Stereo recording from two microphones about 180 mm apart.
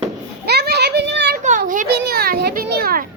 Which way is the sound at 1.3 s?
50° right (ahead or behind).